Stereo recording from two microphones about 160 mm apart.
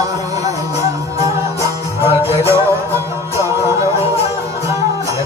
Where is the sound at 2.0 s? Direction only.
40° left (ahead or behind).